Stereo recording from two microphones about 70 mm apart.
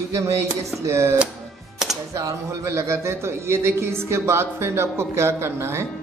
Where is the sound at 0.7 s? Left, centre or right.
Right.